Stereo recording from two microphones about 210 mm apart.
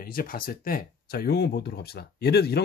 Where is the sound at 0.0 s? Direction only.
45° left (ahead or behind).